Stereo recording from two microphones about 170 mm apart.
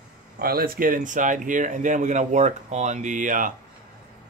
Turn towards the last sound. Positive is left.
turn(degrees=-50)  # may be behind; listen again after turning